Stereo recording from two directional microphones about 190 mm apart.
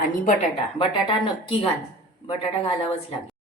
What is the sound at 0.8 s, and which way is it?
Speech, 25° left (ahead or behind).